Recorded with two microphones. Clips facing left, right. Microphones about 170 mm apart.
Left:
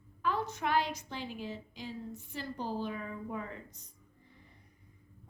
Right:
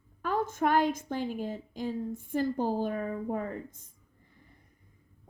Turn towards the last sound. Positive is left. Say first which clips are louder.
# right 7 dB
turn(degrees=-50)  # may be behind; listen again after turning